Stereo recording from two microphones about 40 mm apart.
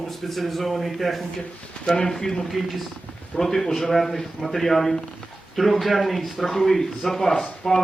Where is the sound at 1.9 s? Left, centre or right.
Centre.